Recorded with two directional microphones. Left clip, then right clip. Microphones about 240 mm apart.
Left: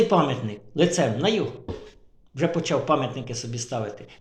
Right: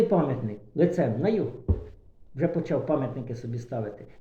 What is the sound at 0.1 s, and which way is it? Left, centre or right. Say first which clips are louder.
Speech: left 4 dB; left.